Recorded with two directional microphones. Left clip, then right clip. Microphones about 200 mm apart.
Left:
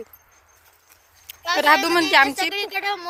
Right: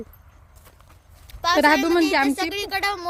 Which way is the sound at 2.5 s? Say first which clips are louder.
Even; 75° right (ahead or behind).